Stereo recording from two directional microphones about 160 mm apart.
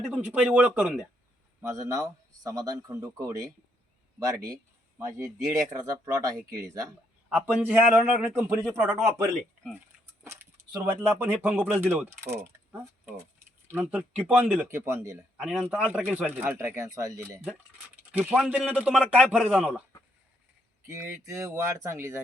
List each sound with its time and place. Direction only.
0.1 s speech: 10° right (ahead or behind)
4.9 s speech: 15° right (ahead or behind)
7.3 s speech: 5° right (ahead or behind)
12.2 s mechanisms: 15° right (ahead or behind)
13.7 s speech: 10° right (ahead or behind)
15.4 s speech: 5° right (ahead or behind)
20.8 s speech: 15° right (ahead or behind)